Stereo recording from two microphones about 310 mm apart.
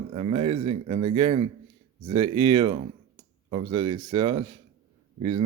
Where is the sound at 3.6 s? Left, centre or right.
Right.